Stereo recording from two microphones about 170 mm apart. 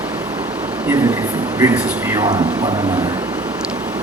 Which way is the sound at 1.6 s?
20° right (ahead or behind).